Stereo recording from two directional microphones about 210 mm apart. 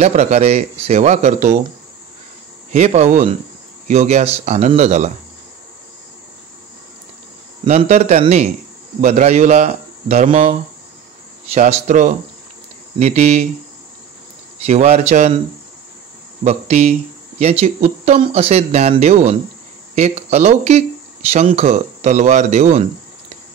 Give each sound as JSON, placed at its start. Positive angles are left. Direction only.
{"t": 0.0, "sound": "speech", "side_deg": -35}
{"t": 2.7, "sound": "speech", "side_deg": -35}
{"t": 7.6, "sound": "speech", "side_deg": -35}
{"t": 14.7, "sound": "speech", "side_deg": -30}
{"t": 16.4, "sound": "speech", "side_deg": -30}